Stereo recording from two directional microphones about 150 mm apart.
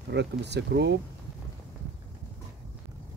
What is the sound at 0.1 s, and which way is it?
Speech, 90° right.